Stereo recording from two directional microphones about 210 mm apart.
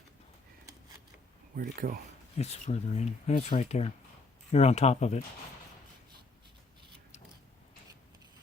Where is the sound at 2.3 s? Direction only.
30° left (ahead or behind).